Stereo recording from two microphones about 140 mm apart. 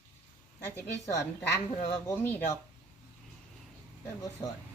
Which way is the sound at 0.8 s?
20° left (ahead or behind).